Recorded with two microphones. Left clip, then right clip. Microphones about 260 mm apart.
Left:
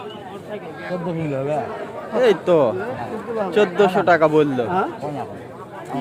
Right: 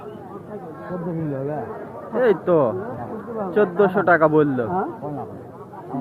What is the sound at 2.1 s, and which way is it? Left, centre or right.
A man's voice, centre.